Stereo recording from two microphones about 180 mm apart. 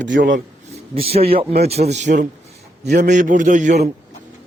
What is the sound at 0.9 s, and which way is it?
Speech, 35° right (ahead or behind).